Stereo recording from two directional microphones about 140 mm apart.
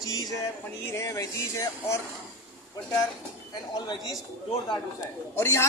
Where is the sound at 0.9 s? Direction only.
20° left (ahead or behind).